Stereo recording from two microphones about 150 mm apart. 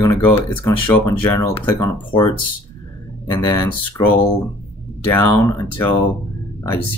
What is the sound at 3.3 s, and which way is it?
Speech, 25° left (ahead or behind).